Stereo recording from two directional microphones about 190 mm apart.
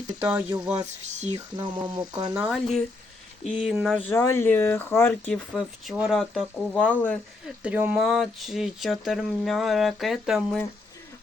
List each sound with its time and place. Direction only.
0.2 s speech: 10° right (ahead or behind)
0.5 s speech: 20° right (ahead or behind)
0.9 s speech: 35° right (ahead or behind)
1.5 s speech: 25° right (ahead or behind)
2.4 s speech: centre (ahead or behind)
7.4 s speech: 5° right (ahead or behind)